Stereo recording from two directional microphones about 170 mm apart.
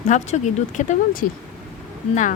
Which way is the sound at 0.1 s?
45° left (ahead or behind).